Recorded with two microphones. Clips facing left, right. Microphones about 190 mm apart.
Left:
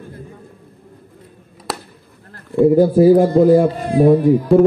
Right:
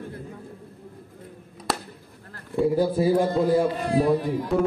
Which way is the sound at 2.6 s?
50° left (ahead or behind).